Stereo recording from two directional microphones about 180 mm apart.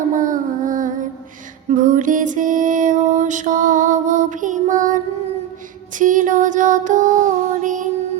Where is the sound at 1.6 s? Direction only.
45° right (ahead or behind).